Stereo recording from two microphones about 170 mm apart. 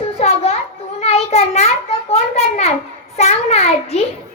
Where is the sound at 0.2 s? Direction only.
40° left (ahead or behind).